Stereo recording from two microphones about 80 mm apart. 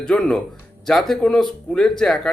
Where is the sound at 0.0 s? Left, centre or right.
Centre.